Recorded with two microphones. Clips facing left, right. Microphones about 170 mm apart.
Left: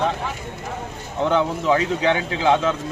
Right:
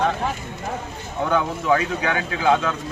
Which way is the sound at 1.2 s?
25° left (ahead or behind).